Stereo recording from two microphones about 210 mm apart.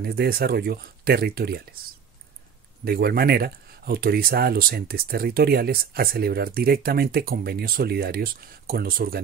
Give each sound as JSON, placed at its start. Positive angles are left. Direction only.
{"t": 0.0, "sound": "speech", "side_deg": -45}
{"t": 2.8, "sound": "speech", "side_deg": -45}